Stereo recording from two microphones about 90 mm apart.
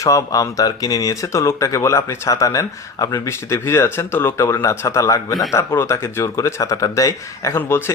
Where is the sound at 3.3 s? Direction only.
30° left (ahead or behind).